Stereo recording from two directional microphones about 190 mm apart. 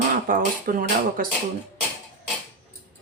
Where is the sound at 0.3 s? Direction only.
45° right (ahead or behind).